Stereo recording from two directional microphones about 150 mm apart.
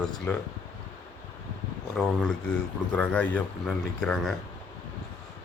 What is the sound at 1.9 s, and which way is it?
A man's voice, 5° left (ahead or behind).